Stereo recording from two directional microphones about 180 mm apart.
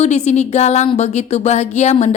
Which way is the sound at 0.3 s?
40° left (ahead or behind).